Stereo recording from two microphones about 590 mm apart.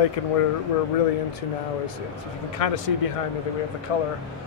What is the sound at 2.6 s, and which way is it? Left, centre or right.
Speech, left.